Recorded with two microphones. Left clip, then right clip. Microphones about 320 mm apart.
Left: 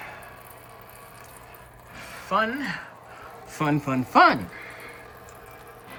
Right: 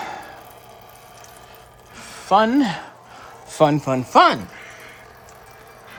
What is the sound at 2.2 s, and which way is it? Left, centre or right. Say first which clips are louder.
Speech: right 9 dB; centre.